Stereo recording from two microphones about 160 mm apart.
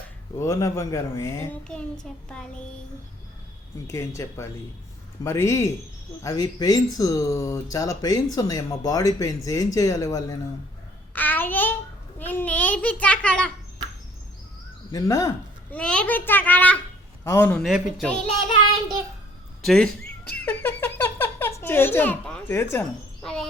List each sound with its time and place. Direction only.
0.3 s speech: 20° left (ahead or behind)
2.1 s a woman's voice: centre (ahead or behind)
3.8 s a child's voice: 15° left (ahead or behind)
11.1 s babbling: 10° left (ahead or behind)
12.2 s a child's voice: 10° left (ahead or behind)
14.9 s speech: 20° left (ahead or behind)
15.7 s a child's voice: 5° left (ahead or behind)
17.7 s a woman's voice: 5° right (ahead or behind)
19.6 s speech: 5° left (ahead or behind)
23.2 s a woman's voice: centre (ahead or behind)